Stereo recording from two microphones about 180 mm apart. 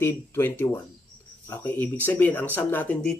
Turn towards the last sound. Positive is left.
turn(degrees=5)  # may be behind; listen again after turning